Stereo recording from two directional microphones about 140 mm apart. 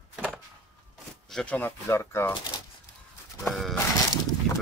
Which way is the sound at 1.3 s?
5° left (ahead or behind).